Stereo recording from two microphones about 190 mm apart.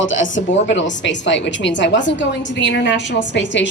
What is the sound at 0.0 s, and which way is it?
A woman's voice, 80° left.